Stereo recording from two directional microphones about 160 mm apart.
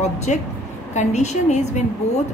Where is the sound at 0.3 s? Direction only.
45° left (ahead or behind).